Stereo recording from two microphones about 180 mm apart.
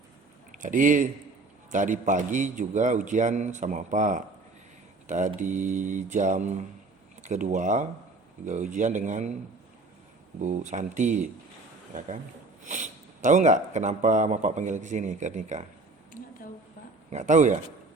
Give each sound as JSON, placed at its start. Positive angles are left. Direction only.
{"t": 0.5, "sound": "a man's voice", "side_deg": -45}
{"t": 10.4, "sound": "a man's voice", "side_deg": -40}
{"t": 16.1, "sound": "a sound", "side_deg": 50}
{"t": 17.1, "sound": "a man's voice", "side_deg": -40}